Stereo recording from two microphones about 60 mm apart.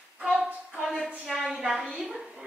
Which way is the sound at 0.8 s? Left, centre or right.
Centre.